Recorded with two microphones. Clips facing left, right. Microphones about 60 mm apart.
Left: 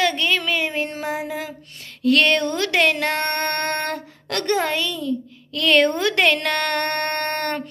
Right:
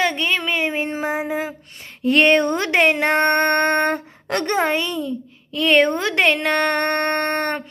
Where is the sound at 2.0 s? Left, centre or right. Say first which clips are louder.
Right 2 dB; right.